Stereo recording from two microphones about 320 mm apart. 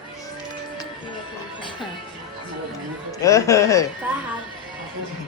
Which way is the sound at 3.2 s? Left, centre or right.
Centre.